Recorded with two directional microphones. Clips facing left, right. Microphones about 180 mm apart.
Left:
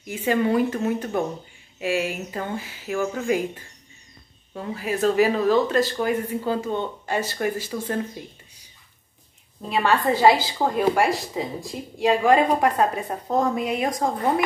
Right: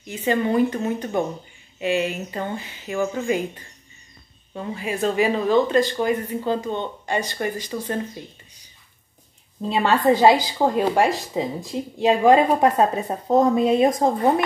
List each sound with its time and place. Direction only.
0.0 s speech: 10° left (ahead or behind)
7.7 s speech: 10° right (ahead or behind)
9.7 s a woman's voice: 20° right (ahead or behind)